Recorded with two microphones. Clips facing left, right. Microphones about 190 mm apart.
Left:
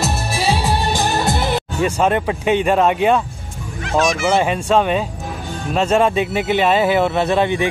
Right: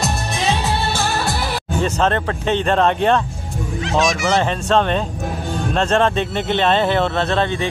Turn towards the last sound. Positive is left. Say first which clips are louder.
# left 3 dB
turn(degrees=10)  # may be behind; listen again after turning